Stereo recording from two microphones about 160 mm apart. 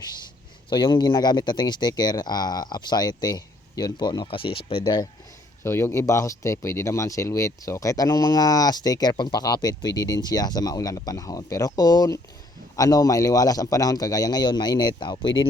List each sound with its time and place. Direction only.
0.7 s speech: 30° left (ahead or behind)
5.6 s speech: 15° left (ahead or behind)